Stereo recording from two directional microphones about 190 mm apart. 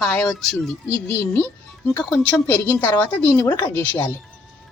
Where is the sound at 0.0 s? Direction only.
5° left (ahead or behind).